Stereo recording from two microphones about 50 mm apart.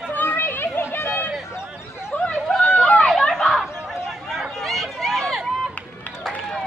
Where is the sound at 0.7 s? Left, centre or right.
Left.